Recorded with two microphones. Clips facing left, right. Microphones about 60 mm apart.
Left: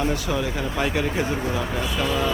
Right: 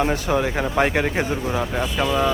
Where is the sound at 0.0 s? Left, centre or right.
Right.